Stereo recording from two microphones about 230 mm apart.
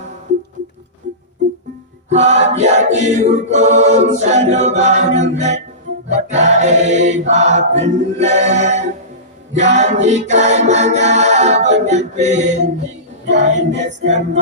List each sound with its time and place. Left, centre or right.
2.0 s a capella: right
6.0 s music: right
9.5 s a capella: right
13.4 s music: right
14.0 s a capella: right